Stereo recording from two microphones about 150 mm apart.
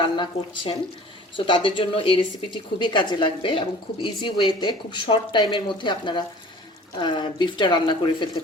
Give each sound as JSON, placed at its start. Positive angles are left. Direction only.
{"t": 0.0, "sound": "speech", "side_deg": 35}